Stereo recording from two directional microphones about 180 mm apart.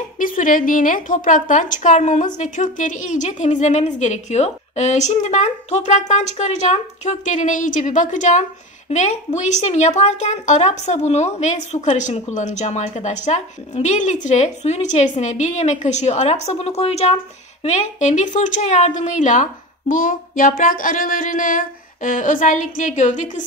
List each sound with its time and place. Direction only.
0.2 s a woman's voice: 50° left (ahead or behind)